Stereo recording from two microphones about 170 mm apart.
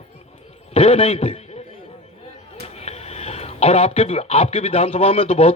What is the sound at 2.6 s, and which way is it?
Speech, 40° left (ahead or behind).